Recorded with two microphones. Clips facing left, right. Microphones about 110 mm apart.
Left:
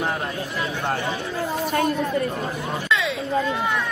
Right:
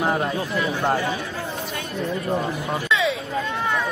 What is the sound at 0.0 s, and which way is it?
Speech, 20° right (ahead or behind).